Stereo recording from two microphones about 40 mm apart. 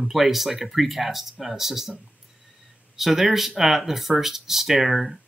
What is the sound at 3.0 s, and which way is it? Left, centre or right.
Speech, centre.